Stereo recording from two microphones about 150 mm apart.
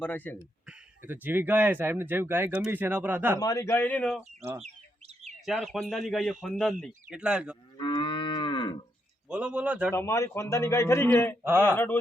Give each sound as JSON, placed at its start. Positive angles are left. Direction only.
{"t": 0.0, "sound": "a man's voice", "side_deg": 10}
{"t": 0.7, "sound": "speech", "side_deg": -10}
{"t": 3.4, "sound": "a man's voice", "side_deg": 20}
{"t": 4.6, "sound": "bird", "side_deg": -45}
{"t": 5.5, "sound": "speech", "side_deg": 0}
{"t": 7.8, "sound": "moo", "side_deg": 30}
{"t": 9.3, "sound": "speech", "side_deg": -10}
{"t": 9.9, "sound": "a man's voice", "side_deg": 15}